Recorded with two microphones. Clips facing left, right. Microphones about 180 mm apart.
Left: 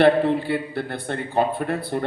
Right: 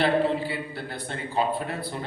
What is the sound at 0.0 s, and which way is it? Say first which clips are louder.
A man's voice: left 6 dB; 60° left (ahead or behind).